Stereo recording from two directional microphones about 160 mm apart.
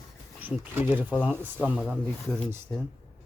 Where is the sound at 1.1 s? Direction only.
10° left (ahead or behind).